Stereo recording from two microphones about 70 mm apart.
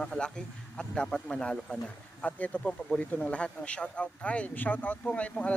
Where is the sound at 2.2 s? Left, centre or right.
Centre.